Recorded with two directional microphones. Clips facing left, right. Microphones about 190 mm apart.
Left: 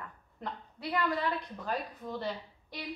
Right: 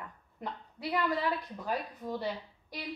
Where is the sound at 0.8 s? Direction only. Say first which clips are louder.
Right 1 dB; 5° right (ahead or behind).